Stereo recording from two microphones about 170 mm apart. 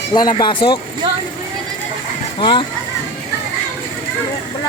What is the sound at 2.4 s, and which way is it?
Speech, 30° left (ahead or behind).